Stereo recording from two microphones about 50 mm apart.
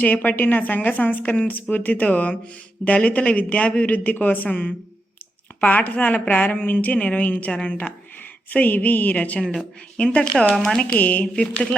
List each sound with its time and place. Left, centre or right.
0.0 s speech: left
10.5 s speech: centre
10.9 s speech: left